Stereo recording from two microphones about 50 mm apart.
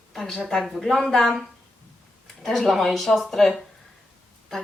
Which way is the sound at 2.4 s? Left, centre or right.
Centre.